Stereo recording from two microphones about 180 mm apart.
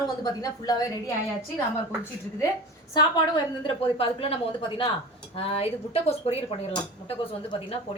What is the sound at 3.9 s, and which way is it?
A woman's voice, 30° left (ahead or behind).